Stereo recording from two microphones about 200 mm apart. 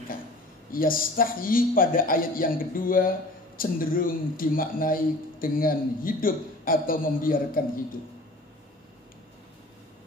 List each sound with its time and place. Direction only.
0.7 s a man's voice: 45° left (ahead or behind)